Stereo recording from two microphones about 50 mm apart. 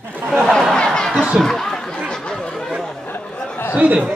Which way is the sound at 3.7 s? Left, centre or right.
Right.